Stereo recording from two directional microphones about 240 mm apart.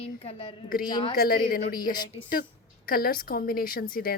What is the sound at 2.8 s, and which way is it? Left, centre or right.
A woman's voice, left.